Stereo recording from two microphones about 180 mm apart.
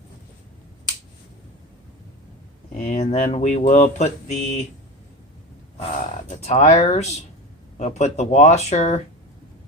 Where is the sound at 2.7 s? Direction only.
45° left (ahead or behind).